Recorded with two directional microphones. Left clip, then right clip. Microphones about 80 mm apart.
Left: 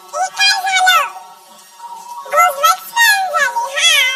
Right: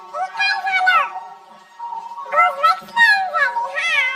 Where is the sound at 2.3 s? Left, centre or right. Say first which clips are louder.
Left 3 dB; left.